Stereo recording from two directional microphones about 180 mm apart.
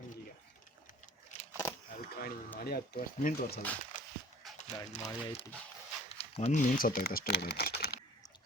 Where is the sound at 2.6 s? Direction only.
60° left (ahead or behind).